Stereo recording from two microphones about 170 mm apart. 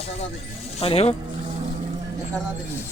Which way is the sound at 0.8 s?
35° left (ahead or behind).